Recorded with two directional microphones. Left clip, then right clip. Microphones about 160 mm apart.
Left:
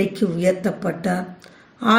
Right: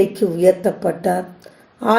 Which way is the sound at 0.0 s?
35° right (ahead or behind).